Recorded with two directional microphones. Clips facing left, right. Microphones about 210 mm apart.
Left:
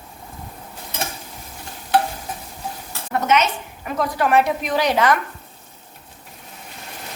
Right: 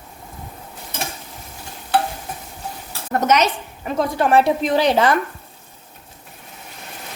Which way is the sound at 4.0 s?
30° right (ahead or behind).